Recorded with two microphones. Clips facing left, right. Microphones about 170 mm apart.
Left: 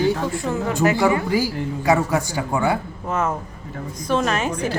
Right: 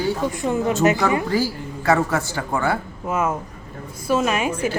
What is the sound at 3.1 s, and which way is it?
Speech, 10° right (ahead or behind).